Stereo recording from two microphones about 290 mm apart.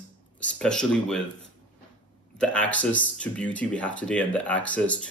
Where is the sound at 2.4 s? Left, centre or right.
Centre.